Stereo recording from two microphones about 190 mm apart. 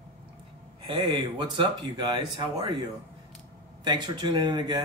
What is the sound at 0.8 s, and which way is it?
Speech, 25° right (ahead or behind).